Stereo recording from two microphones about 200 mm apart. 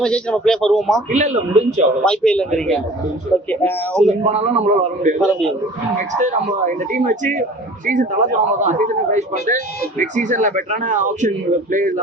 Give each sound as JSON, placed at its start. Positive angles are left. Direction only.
{"t": 0.0, "sound": "a man's voice", "side_deg": 5}
{"t": 1.1, "sound": "a man's voice", "side_deg": -35}
{"t": 2.0, "sound": "a man's voice", "side_deg": 5}
{"t": 3.5, "sound": "a man's voice", "side_deg": 5}
{"t": 4.3, "sound": "a man's voice", "side_deg": -35}
{"t": 6.1, "sound": "a man's voice", "side_deg": -40}